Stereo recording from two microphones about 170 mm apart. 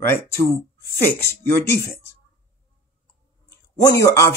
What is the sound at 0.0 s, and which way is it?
Speech, 15° left (ahead or behind).